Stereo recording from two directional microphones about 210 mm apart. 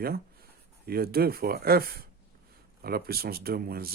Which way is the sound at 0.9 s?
45° right (ahead or behind).